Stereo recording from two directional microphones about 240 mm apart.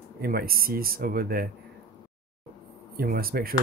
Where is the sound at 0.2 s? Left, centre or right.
Right.